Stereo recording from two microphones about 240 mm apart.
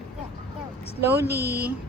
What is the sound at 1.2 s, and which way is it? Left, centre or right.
Speech, right.